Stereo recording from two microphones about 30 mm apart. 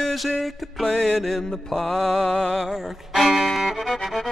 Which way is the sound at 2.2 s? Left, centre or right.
Left.